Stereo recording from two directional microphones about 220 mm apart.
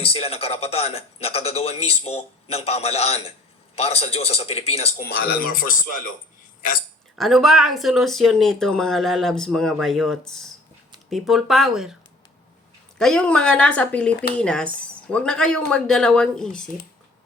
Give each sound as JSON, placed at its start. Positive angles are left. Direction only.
{"t": 0.0, "sound": "a man's voice", "side_deg": 25}
{"t": 5.0, "sound": "speech", "side_deg": 45}
{"t": 7.2, "sound": "speech", "side_deg": 0}
{"t": 13.0, "sound": "speech", "side_deg": 5}